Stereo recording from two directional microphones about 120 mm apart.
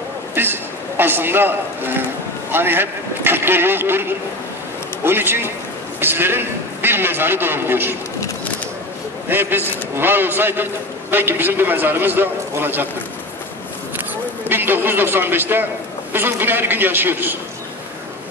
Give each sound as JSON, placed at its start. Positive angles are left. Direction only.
{"t": 0.3, "sound": "a man's voice", "side_deg": -20}
{"t": 9.3, "sound": "a man's voice", "side_deg": -15}
{"t": 14.5, "sound": "a man's voice", "side_deg": -15}